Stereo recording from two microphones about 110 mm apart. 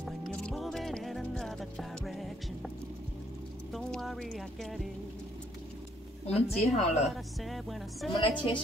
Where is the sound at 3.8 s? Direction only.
5° left (ahead or behind).